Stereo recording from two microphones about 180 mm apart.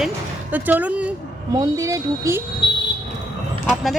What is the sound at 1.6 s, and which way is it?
Speech, 20° right (ahead or behind).